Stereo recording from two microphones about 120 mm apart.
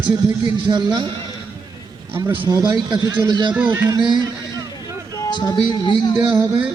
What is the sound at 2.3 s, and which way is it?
A man's voice, 40° right (ahead or behind).